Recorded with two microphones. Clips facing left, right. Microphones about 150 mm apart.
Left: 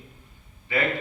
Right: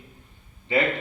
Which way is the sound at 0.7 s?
25° right (ahead or behind).